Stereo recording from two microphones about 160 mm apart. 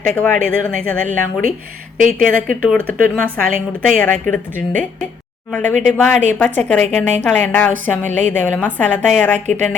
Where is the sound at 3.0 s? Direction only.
60° right (ahead or behind).